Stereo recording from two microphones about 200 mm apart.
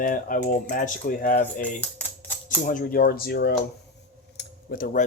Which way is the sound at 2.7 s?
45° left (ahead or behind).